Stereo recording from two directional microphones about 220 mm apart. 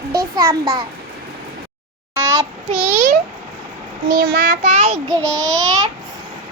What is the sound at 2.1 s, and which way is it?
Child singing, 15° right (ahead or behind).